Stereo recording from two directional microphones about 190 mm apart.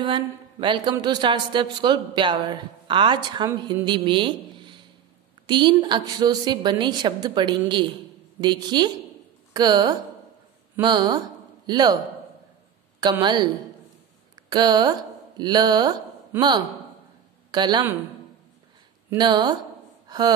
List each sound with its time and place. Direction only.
0.0 s a man's voice: 25° right (ahead or behind)
13.0 s a man's voice: 20° right (ahead or behind)
19.0 s a man's voice: 20° right (ahead or behind)